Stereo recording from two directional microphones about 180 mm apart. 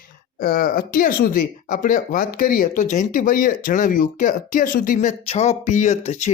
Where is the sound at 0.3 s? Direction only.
55° left (ahead or behind).